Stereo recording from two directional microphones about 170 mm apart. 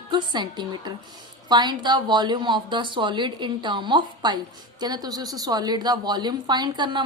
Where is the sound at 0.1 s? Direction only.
25° right (ahead or behind).